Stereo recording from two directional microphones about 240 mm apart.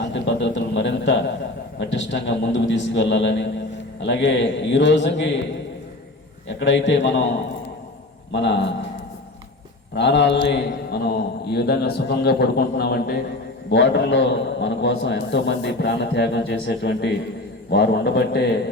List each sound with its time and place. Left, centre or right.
0.1 s a sound: left
1.8 s a man's voice: left
6.6 s a man's voice: left
8.3 s a man's voice: left
9.9 s a man's voice: left